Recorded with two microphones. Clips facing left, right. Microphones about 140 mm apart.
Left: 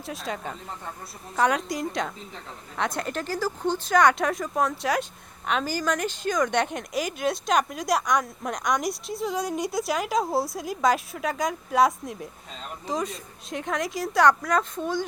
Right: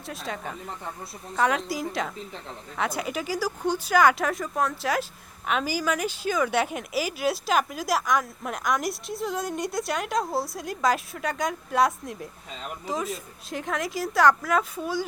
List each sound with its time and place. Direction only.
0.0 s speech: centre (ahead or behind)